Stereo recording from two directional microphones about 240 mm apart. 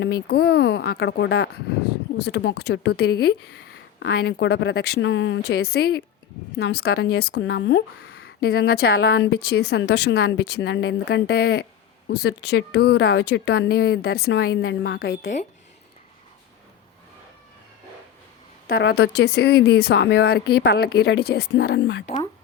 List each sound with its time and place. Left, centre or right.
0.0 s speech: left
18.7 s speech: left